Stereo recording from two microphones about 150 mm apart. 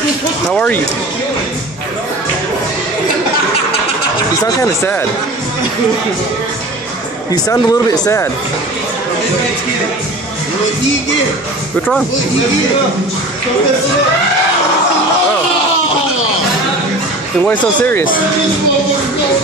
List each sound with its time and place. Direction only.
0.5 s speech: 10° left (ahead or behind)
4.4 s speech: 15° left (ahead or behind)
7.2 s speech: 25° left (ahead or behind)
17.7 s speech: 10° left (ahead or behind)